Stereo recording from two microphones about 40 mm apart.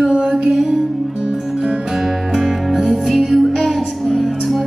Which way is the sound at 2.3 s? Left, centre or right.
Centre.